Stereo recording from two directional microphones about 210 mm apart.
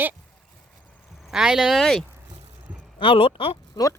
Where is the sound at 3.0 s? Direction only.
25° left (ahead or behind).